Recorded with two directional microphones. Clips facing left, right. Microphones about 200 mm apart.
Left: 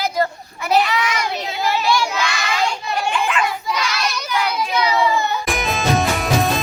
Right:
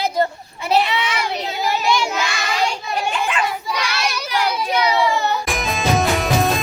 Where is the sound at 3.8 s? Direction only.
10° right (ahead or behind).